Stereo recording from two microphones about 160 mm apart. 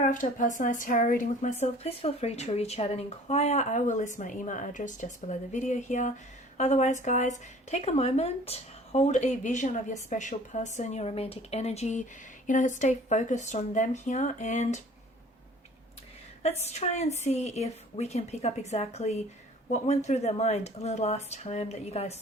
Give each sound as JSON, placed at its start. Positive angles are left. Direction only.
{"t": 0.0, "sound": "speech", "side_deg": 55}
{"t": 16.4, "sound": "speech", "side_deg": 40}